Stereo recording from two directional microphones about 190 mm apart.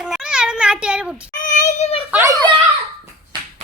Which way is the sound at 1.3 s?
45° left (ahead or behind).